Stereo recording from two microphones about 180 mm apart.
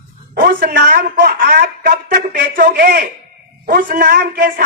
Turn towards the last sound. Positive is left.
turn(degrees=-50)  # may be behind; listen again after turning